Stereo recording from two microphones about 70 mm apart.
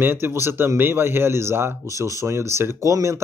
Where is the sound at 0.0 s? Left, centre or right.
Right.